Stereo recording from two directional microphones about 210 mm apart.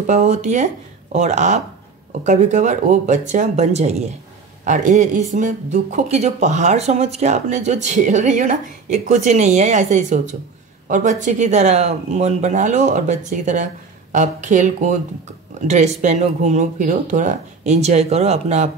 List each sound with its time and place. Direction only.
0.0 s speech: 35° right (ahead or behind)